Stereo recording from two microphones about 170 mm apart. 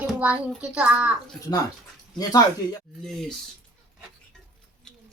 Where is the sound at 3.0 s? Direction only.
5° left (ahead or behind).